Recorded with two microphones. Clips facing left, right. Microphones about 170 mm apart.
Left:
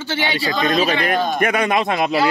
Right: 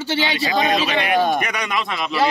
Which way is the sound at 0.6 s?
40° left (ahead or behind).